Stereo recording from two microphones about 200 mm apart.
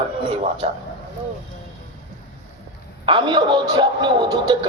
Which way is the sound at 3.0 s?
20° right (ahead or behind).